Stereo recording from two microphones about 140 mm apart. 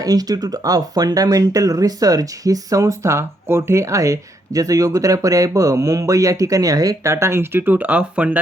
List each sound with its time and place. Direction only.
0.0 s speech: 25° right (ahead or behind); by 8.4 s 10° right (ahead or behind)